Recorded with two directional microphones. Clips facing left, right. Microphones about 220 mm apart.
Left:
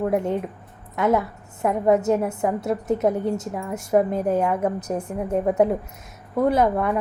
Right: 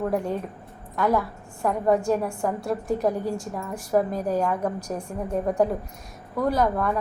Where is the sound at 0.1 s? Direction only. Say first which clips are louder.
Left 3 dB; 20° left (ahead or behind).